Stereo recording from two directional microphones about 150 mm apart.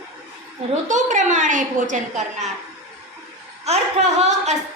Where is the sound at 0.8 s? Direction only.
55° right (ahead or behind).